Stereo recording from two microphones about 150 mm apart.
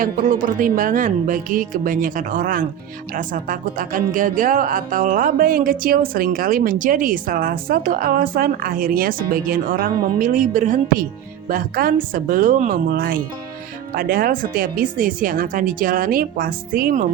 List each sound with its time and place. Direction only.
0.0 s speech: 70° right (ahead or behind)
11.4 s speech: 80° right
12.1 s speech: 65° right (ahead or behind)